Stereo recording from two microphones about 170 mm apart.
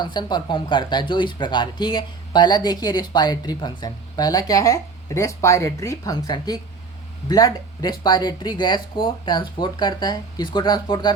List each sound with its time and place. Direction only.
0.0 s speech: 25° left (ahead or behind)